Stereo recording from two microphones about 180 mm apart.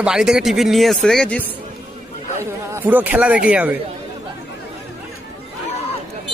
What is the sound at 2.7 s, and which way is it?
A man's voice, 10° right (ahead or behind).